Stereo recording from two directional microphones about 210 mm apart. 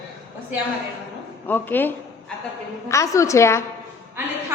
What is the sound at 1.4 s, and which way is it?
Speech, 10° left (ahead or behind).